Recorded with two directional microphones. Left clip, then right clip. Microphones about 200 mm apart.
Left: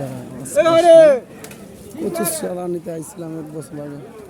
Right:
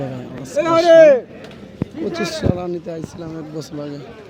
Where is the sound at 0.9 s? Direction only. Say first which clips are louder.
Right 1 dB; 40° right (ahead or behind).